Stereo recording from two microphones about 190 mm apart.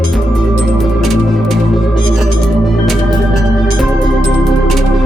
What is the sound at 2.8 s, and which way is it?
Music, centre (ahead or behind).